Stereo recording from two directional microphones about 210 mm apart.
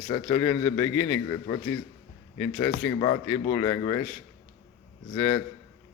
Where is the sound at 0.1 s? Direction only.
15° left (ahead or behind).